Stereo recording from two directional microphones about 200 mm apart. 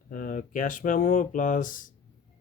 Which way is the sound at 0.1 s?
40° left (ahead or behind).